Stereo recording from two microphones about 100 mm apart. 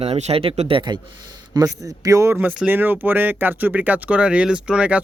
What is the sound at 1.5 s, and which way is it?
A man's voice, 35° right (ahead or behind).